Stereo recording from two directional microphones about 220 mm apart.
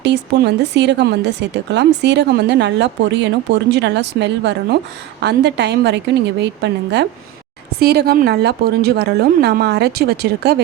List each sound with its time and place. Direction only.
0.0 s speech: 50° right (ahead or behind)